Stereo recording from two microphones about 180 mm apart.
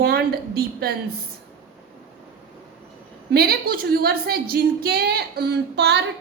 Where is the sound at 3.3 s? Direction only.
60° right (ahead or behind).